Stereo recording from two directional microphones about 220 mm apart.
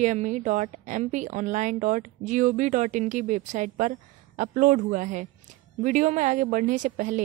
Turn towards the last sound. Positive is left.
turn(degrees=-35)  # may be behind; listen again after turning